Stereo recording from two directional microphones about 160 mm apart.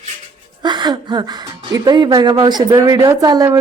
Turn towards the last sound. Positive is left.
turn(degrees=-25)  # may be behind; listen again after turning